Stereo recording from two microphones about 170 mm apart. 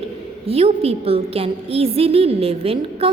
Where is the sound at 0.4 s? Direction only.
35° right (ahead or behind).